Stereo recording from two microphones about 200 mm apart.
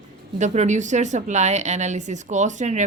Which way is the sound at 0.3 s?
35° right (ahead or behind).